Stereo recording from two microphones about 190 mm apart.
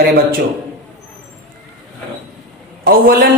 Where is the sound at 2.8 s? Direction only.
50° right (ahead or behind).